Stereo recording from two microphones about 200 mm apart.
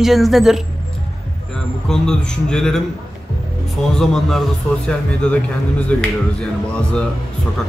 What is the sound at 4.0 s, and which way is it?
Speech, centre (ahead or behind).